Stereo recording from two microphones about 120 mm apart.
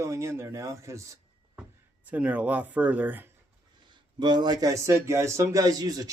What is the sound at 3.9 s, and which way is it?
A man's voice, 40° right (ahead or behind).